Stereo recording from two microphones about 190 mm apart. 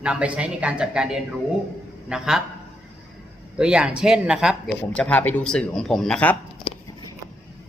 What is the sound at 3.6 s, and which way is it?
Speech, 5° right (ahead or behind).